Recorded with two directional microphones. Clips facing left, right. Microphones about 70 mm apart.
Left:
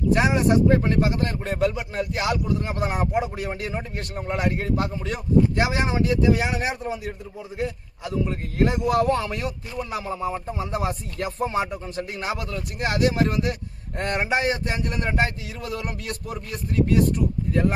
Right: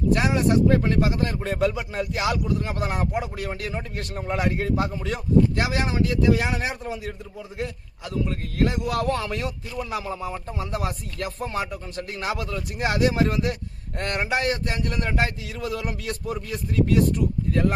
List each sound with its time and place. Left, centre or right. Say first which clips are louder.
0.1 s a man's voice: left 2 dB; centre
5.6 s a man's voice: left 2 dB; left
12.1 s speech: right 3 dB; centre
13.1 s speech: even; centre
14.0 s a man's voice: left 2 dB; centre